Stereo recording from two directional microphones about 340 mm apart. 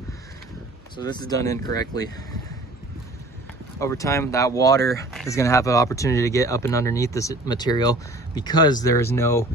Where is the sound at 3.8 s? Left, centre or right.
Centre.